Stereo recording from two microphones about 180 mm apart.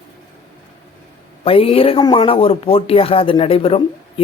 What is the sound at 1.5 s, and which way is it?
Speech, 30° left (ahead or behind).